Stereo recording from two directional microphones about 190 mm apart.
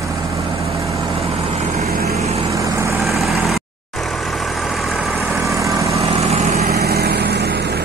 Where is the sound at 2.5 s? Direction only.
15° right (ahead or behind).